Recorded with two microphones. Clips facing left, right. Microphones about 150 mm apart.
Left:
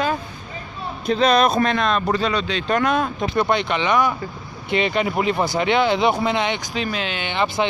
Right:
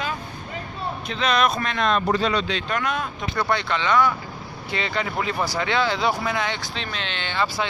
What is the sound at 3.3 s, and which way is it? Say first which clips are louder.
Speech: left 3 dB; 20° left (ahead or behind).